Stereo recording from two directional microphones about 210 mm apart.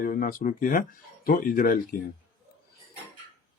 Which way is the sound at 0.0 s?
40° left (ahead or behind).